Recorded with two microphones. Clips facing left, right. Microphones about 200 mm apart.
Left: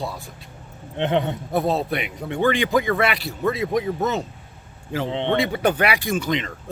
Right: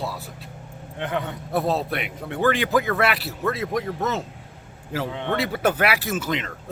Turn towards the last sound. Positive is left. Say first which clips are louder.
# left 3 dB
turn(degrees=-5)  # may be behind; listen again after turning